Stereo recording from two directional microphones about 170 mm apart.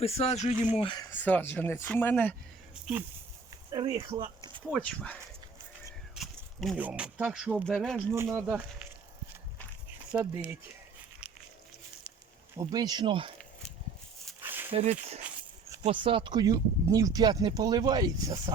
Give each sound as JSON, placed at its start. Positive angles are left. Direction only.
{"t": 0.0, "sound": "speech", "side_deg": 40}
{"t": 0.8, "sound": "speech", "side_deg": 30}
{"t": 1.1, "sound": "speech", "side_deg": 10}
{"t": 3.7, "sound": "speech", "side_deg": -20}
{"t": 4.0, "sound": "speech", "side_deg": -30}
{"t": 4.8, "sound": "speech", "side_deg": 5}
{"t": 6.1, "sound": "a sound", "side_deg": 0}
{"t": 6.7, "sound": "speech", "side_deg": -10}
{"t": 8.1, "sound": "speech", "side_deg": -15}
{"t": 10.1, "sound": "speech", "side_deg": -5}
{"t": 11.2, "sound": "walk", "side_deg": -5}
{"t": 12.5, "sound": "speech", "side_deg": -20}
{"t": 14.4, "sound": "a sound", "side_deg": -10}
{"t": 14.7, "sound": "speech", "side_deg": -35}